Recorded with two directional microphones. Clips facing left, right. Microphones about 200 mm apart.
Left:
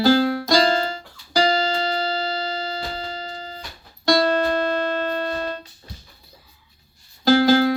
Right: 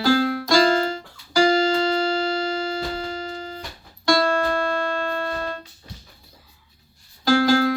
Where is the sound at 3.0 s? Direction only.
30° left (ahead or behind).